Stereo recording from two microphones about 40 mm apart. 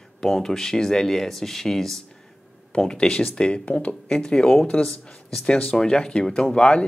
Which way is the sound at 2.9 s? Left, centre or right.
Left.